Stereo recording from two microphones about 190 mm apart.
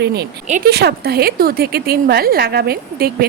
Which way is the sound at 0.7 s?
60° right (ahead or behind).